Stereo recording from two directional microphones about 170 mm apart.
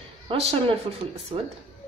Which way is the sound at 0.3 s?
35° right (ahead or behind).